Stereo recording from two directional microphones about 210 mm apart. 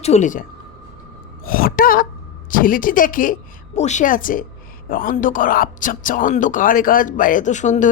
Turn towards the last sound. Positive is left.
turn(degrees=35)  # may be behind; listen again after turning